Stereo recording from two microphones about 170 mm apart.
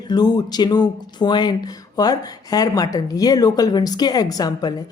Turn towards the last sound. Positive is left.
turn(degrees=20)  # may be behind; listen again after turning